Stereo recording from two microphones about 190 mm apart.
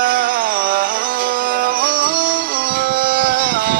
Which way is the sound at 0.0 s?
50° right (ahead or behind).